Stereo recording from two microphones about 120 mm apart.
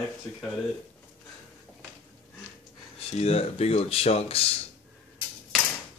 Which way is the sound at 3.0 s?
60° left (ahead or behind).